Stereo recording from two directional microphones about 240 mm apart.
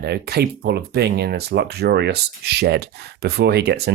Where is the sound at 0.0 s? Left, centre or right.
Right.